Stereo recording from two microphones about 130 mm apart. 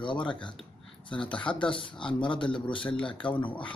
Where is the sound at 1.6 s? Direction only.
40° left (ahead or behind).